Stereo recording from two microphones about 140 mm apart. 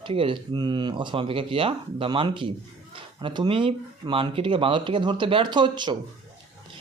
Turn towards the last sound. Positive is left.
turn(degrees=-30)  # may be behind; listen again after turning